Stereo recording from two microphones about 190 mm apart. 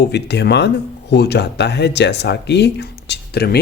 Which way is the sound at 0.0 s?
60° left (ahead or behind).